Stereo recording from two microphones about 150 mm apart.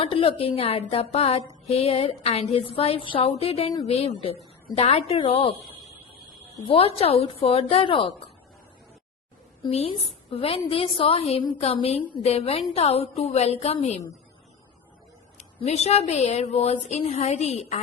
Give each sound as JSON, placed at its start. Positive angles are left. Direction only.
{"t": 0.0, "sound": "a woman's voice", "side_deg": 40}
{"t": 6.7, "sound": "a woman's voice", "side_deg": 40}
{"t": 9.6, "sound": "a woman's voice", "side_deg": 40}
{"t": 15.4, "sound": "speech", "side_deg": 45}
{"t": 16.7, "sound": "a woman's voice", "side_deg": 35}